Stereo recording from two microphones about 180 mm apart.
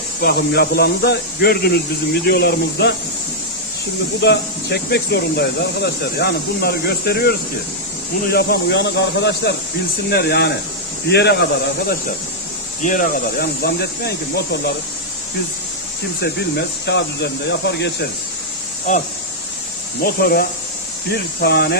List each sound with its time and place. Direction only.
0.2 s speech: 60° left (ahead or behind)
4.2 s speech: 70° left (ahead or behind)
12.8 s speech: 45° left (ahead or behind)
16.2 s speech: 70° left (ahead or behind)
20.0 s speech: 60° left (ahead or behind)